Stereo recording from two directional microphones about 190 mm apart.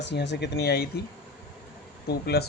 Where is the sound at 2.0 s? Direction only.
55° left (ahead or behind).